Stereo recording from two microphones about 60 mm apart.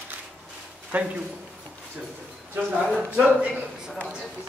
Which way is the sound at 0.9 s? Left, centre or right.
Right.